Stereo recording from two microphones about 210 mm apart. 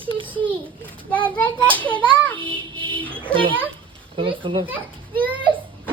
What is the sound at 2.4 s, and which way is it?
Child singing, 25° right (ahead or behind).